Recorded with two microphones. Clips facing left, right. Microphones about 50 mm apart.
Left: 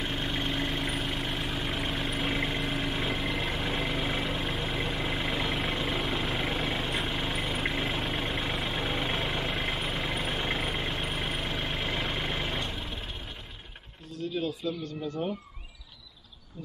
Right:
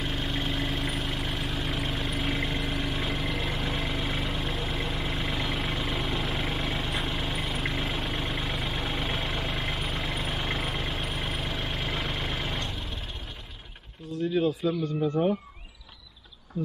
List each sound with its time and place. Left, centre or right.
0.0 s vehicle: centre
14.3 s a sound: right
15.0 s speech: right